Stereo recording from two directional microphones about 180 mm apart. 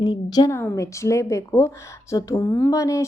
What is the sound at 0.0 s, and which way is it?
A woman's voice, 20° left (ahead or behind).